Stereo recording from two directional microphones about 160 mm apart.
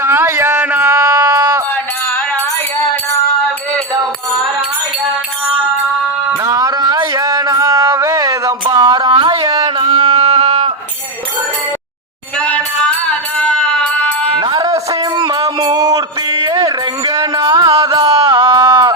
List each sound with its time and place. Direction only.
0.0 s a sound: 15° right (ahead or behind)
6.3 s music: 20° right (ahead or behind); by 10.7 s 40° right (ahead or behind)
12.4 s music: 10° left (ahead or behind)
14.3 s music: 25° right (ahead or behind)